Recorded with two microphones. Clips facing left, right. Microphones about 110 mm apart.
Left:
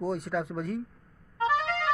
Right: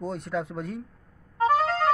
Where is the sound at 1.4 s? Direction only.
40° right (ahead or behind).